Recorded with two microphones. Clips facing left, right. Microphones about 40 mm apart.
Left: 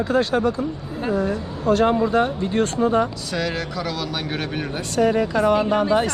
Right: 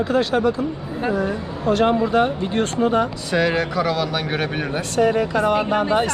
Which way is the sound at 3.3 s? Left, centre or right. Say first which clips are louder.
Right 7 dB; centre.